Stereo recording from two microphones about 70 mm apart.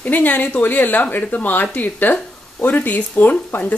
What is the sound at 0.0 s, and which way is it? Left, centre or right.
Speech, left.